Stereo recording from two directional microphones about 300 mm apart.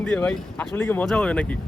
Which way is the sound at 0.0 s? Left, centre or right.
Centre.